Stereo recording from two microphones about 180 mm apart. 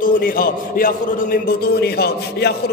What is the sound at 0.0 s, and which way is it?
A man's voice, 55° left (ahead or behind).